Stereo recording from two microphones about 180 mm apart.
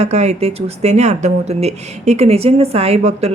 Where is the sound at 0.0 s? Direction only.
40° right (ahead or behind).